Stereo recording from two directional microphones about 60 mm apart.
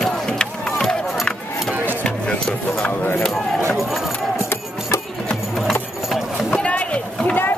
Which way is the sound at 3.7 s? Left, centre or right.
Centre.